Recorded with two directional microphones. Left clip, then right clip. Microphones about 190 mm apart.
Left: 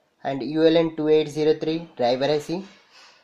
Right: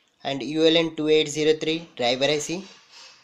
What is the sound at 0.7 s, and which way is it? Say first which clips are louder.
Speech: left 1 dB; centre (ahead or behind).